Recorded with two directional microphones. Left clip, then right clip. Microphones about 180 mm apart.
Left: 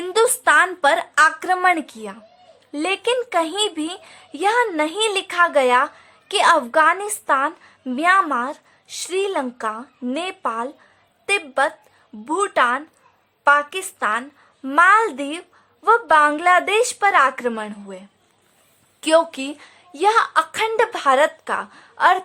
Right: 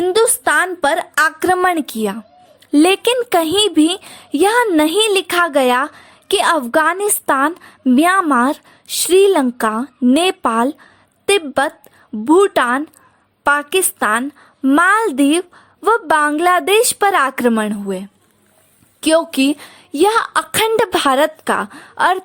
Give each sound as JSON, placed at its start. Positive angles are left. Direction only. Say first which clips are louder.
{"t": 0.0, "sound": "a woman's voice", "louder": "right 3 dB", "side_deg": -30}
{"t": 18.9, "sound": "a woman's voice", "louder": "right 3 dB", "side_deg": -30}